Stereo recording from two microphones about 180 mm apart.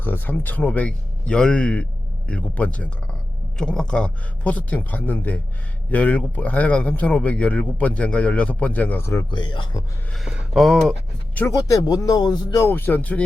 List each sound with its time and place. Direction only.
0.0 s speech: 10° left (ahead or behind); by 9.8 s 25° left (ahead or behind)
10.1 s speech: centre (ahead or behind)
11.3 s speech: 15° left (ahead or behind)